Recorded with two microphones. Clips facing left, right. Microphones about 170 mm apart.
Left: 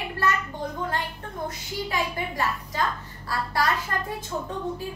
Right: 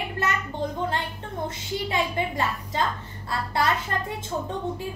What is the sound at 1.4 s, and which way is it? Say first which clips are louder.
A woman's voice: right 1 dB; 25° right (ahead or behind).